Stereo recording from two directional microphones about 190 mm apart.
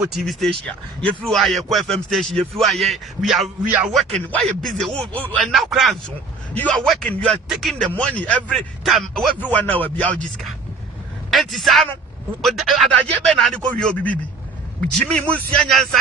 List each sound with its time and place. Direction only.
0.3 s speech: centre (ahead or behind)